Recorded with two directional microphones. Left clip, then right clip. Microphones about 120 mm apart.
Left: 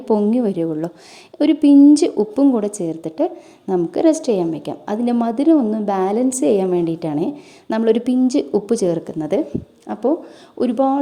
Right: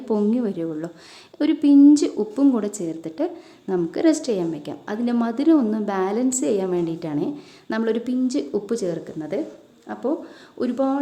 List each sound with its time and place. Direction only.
0.0 s a woman's voice: 40° left (ahead or behind); by 10.1 s 60° left (ahead or behind)
10.6 s a woman's voice: 40° left (ahead or behind)